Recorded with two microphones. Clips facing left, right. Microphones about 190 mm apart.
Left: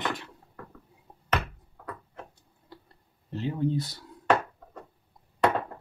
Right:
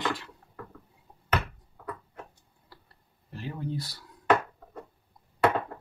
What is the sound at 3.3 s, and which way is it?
Speech, 20° left (ahead or behind).